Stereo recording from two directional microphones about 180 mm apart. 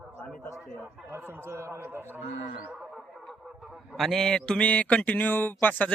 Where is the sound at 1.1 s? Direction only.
10° right (ahead or behind).